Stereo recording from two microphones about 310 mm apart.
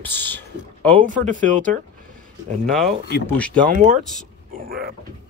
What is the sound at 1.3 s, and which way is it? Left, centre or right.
Speech, right.